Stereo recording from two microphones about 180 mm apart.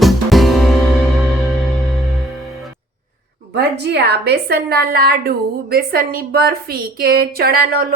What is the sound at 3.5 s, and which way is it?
A woman's voice, 65° right (ahead or behind).